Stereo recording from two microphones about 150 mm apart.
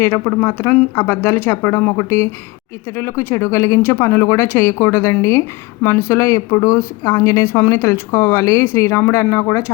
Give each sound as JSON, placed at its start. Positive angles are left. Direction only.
{"t": 0.0, "sound": "a woman's voice", "side_deg": 15}